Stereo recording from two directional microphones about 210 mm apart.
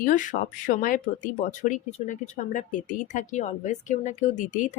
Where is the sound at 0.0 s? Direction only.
40° left (ahead or behind).